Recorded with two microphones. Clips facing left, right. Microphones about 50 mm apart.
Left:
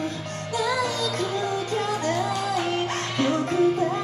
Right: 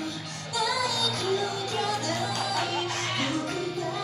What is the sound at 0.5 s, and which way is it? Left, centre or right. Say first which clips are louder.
Music: left 3 dB; left.